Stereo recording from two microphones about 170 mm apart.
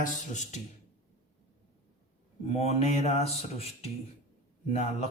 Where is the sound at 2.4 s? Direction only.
35° left (ahead or behind).